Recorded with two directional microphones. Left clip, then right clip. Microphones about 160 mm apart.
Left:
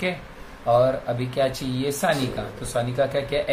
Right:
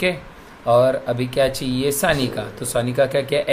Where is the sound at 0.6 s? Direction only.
45° right (ahead or behind).